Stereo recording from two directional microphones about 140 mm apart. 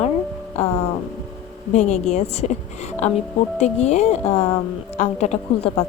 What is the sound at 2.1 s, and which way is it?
Speech, 50° left (ahead or behind).